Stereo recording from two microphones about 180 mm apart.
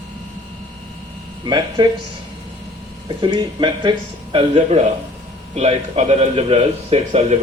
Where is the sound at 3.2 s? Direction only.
25° right (ahead or behind).